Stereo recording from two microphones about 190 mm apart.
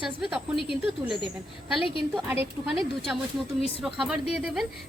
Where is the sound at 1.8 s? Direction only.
30° left (ahead or behind).